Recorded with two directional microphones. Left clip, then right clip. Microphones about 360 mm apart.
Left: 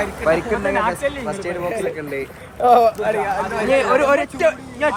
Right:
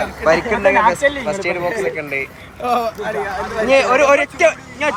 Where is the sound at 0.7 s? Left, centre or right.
Right.